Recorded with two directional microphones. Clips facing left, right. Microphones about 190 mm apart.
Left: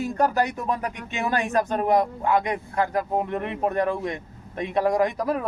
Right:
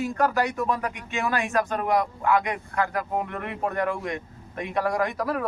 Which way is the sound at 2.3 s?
20° left (ahead or behind).